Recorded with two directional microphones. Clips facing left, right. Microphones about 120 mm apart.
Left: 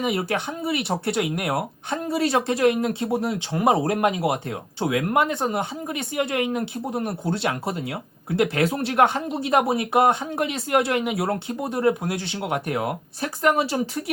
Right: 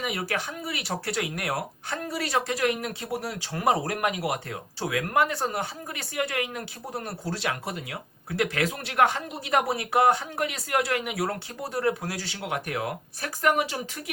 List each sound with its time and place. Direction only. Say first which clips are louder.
0.0 s speech: left 6 dB; 25° left (ahead or behind)